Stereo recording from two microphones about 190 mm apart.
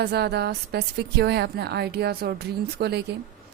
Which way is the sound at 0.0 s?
60° right (ahead or behind).